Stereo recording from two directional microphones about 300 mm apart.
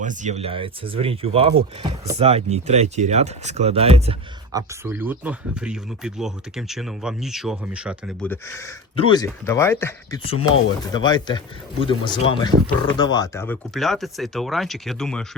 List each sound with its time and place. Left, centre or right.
0.0 s speech: right; by 15.3 s centre